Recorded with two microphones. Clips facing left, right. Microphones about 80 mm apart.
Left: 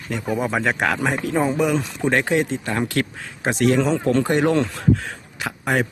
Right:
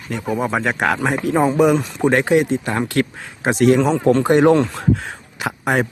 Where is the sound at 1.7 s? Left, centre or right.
Centre.